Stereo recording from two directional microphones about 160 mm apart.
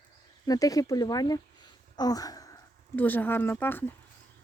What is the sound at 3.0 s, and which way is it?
Speech, 10° left (ahead or behind).